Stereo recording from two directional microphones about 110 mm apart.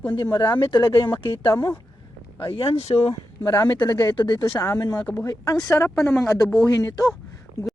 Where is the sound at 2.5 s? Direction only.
65° left (ahead or behind).